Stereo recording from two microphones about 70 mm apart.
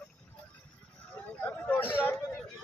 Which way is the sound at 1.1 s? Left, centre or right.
Left.